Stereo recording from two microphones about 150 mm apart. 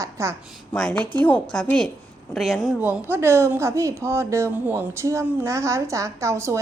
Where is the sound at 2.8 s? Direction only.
10° right (ahead or behind).